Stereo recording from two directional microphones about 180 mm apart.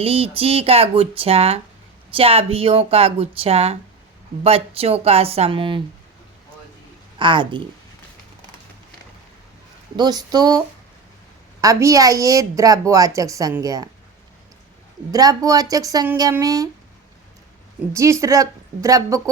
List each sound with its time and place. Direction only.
0.0 s speech: 30° right (ahead or behind)
7.2 s a woman's voice: 25° right (ahead or behind)
10.0 s a woman's voice: 20° right (ahead or behind)
11.6 s a woman's voice: 20° right (ahead or behind)
15.1 s a woman's voice: 20° right (ahead or behind)
17.9 s a woman's voice: 15° right (ahead or behind)